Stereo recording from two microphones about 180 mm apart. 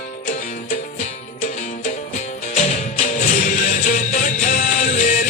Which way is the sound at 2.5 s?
40° left (ahead or behind).